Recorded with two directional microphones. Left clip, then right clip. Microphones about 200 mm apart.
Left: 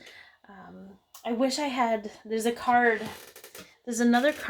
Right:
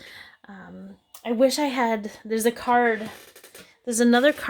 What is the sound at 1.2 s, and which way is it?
Speech, 50° right (ahead or behind).